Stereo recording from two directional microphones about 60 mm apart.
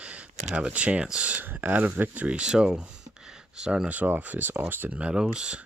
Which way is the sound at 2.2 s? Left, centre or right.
Centre.